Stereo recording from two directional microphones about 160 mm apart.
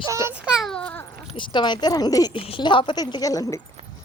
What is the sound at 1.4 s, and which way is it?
A woman's voice, 30° left (ahead or behind).